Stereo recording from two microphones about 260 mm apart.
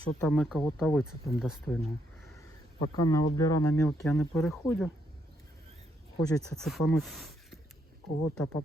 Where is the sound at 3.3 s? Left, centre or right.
Centre.